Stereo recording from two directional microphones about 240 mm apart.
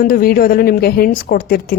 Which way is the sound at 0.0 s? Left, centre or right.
Left.